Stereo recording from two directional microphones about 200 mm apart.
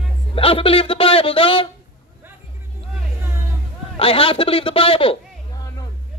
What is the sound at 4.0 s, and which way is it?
Speech, 25° left (ahead or behind).